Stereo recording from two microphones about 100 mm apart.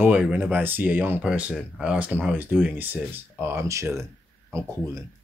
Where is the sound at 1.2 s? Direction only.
10° right (ahead or behind); by 4.1 s 30° right (ahead or behind).